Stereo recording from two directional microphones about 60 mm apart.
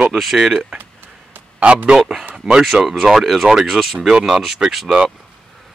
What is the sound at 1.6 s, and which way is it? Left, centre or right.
A man's voice, right.